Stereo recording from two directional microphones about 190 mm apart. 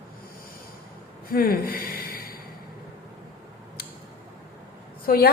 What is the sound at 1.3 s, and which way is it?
Speech, 50° left (ahead or behind).